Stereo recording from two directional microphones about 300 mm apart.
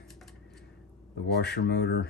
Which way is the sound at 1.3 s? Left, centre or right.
Left.